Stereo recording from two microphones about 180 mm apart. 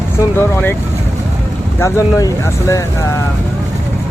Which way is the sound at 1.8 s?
20° left (ahead or behind).